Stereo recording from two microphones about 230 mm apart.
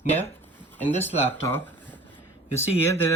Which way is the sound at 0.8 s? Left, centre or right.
Centre.